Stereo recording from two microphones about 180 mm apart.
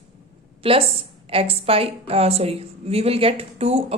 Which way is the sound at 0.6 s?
30° right (ahead or behind).